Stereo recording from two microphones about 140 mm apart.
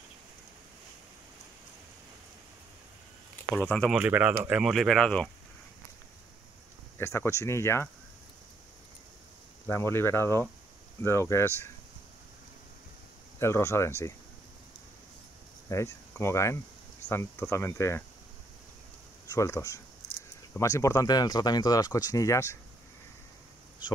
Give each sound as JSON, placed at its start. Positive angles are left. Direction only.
{"t": 3.5, "sound": "speech", "side_deg": 10}
{"t": 3.9, "sound": "speech", "side_deg": -10}
{"t": 7.0, "sound": "speech", "side_deg": 20}
{"t": 9.7, "sound": "speech", "side_deg": 15}
{"t": 13.4, "sound": "speech", "side_deg": 20}
{"t": 15.7, "sound": "speech", "side_deg": 20}
{"t": 19.2, "sound": "speech", "side_deg": 20}